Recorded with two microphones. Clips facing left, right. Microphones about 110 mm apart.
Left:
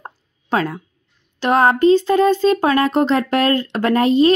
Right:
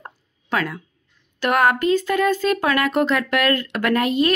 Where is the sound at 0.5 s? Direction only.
30° left (ahead or behind).